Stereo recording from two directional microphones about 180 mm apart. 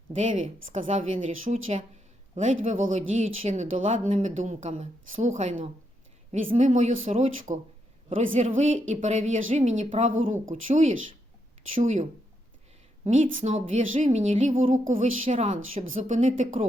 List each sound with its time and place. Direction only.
0.2 s a woman's voice: 45° right (ahead or behind)
13.1 s a woman's voice: 45° right (ahead or behind)